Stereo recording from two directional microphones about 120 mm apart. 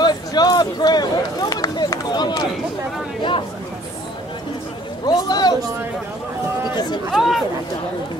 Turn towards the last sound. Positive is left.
turn(degrees=0)  # may be behind; listen again after turning